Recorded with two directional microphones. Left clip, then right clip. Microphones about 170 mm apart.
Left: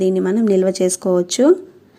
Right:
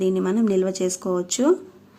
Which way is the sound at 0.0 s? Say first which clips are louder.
Left 5 dB; 20° left (ahead or behind).